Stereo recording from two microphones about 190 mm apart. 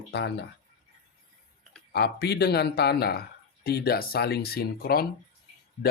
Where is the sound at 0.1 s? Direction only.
60° left (ahead or behind).